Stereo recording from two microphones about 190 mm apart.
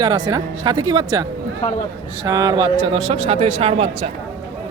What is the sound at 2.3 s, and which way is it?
Speech, 20° right (ahead or behind).